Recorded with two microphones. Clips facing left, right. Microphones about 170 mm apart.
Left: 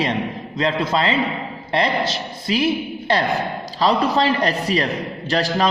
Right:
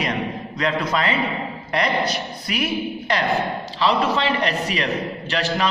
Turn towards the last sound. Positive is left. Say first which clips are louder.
# left 3 dB
turn(degrees=35)  # may be behind; listen again after turning